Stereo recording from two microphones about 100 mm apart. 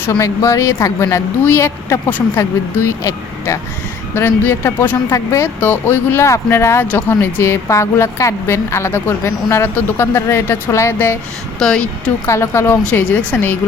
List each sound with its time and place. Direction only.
0.1 s a woman's voice: 30° left (ahead or behind)
5.5 s a woman's voice: 20° left (ahead or behind)
11.6 s a woman's voice: 10° left (ahead or behind)
12.2 s a woman's voice: 30° left (ahead or behind)